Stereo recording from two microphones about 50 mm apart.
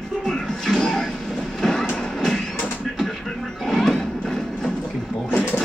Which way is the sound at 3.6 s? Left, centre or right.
Centre.